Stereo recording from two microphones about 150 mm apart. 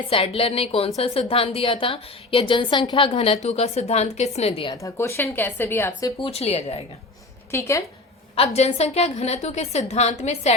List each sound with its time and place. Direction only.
0.1 s a woman's voice: 40° left (ahead or behind)
4.7 s a woman's voice: 20° left (ahead or behind)
6.3 s a woman's voice: 45° left (ahead or behind)
7.5 s a woman's voice: 20° left (ahead or behind)
8.4 s a woman's voice: 45° left (ahead or behind)